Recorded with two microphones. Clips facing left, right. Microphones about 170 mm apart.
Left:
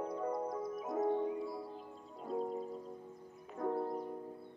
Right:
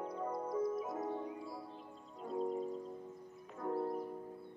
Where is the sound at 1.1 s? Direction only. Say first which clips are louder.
Left 7 dB; 30° left (ahead or behind).